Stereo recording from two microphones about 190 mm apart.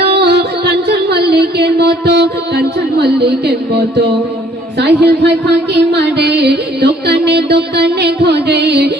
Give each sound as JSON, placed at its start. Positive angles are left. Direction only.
{"t": 0.0, "sound": "music", "side_deg": -60}